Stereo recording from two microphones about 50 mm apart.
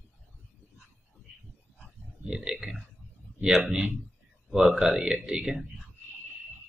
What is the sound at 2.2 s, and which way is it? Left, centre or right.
Speech, centre.